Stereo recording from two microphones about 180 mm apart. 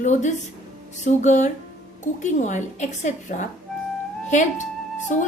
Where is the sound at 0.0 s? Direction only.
40° left (ahead or behind).